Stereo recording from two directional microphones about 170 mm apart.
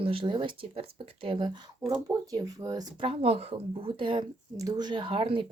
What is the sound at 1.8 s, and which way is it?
Speech, 20° right (ahead or behind).